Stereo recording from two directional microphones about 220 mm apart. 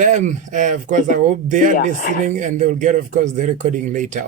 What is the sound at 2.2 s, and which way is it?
Speech, 35° right (ahead or behind).